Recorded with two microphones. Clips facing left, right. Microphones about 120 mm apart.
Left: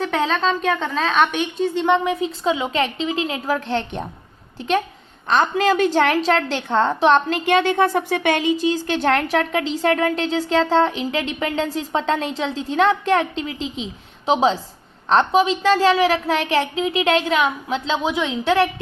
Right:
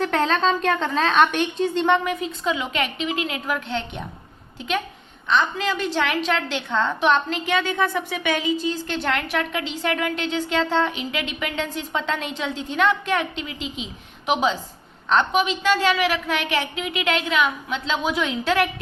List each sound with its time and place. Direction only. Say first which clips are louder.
0.0 s a woman's voice: even; centre (ahead or behind)
1.9 s a woman's voice: left 2 dB; 25° left (ahead or behind); by 4.0 s 40° left (ahead or behind)
5.3 s a woman's voice: left 5 dB; 45° left (ahead or behind); by 18.7 s 25° left (ahead or behind)